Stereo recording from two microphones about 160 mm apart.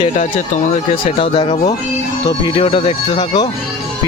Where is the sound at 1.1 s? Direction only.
35° left (ahead or behind).